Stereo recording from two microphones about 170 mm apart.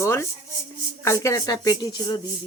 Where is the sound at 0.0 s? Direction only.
15° left (ahead or behind).